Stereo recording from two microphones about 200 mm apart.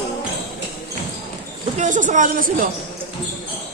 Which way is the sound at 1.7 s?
40° right (ahead or behind).